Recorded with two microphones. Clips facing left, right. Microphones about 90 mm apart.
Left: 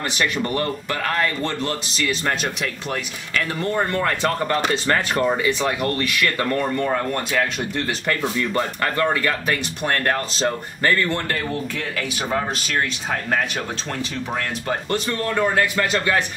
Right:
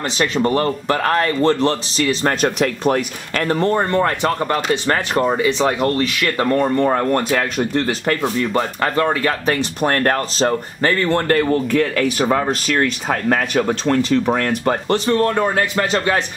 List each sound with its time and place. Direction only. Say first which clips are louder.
0.4 s speech: right 6 dB; 30° right (ahead or behind)
3.9 s speech: right 4 dB; 20° right (ahead or behind)
5.7 s speech: right 5 dB; 35° right (ahead or behind)
5.9 s speech: right 3 dB; 25° right (ahead or behind)
6.6 s speech: right 6 dB; 40° right (ahead or behind)
8.2 s speech: right 4 dB; 25° right (ahead or behind)
9.5 s speech: right 5 dB; 40° right (ahead or behind)
10.8 s speech: right 3 dB; 30° right (ahead or behind); by 14.3 s 65° right (ahead or behind)
14.3 s speech: right 7 dB; 55° right (ahead or behind)
14.9 s speech: right 8 dB; 35° right (ahead or behind)